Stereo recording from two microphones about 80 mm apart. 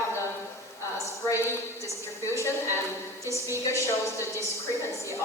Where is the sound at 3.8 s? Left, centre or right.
Left.